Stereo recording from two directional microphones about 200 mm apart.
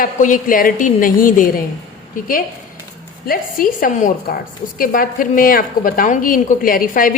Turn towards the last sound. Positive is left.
turn(degrees=45)  # may be behind; listen again after turning